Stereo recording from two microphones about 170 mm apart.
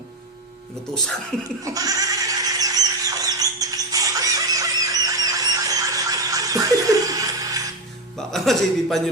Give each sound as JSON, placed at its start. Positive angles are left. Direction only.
{"t": 1.6, "sound": "goat", "side_deg": -20}
{"t": 8.3, "sound": "a man's voice", "side_deg": 0}